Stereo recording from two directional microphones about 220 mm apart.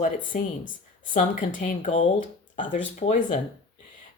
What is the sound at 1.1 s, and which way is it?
A woman's voice, 35° left (ahead or behind).